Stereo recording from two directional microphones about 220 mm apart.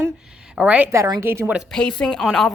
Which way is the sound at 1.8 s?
5° left (ahead or behind).